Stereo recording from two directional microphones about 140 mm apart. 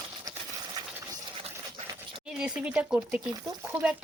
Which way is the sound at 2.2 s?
5° right (ahead or behind).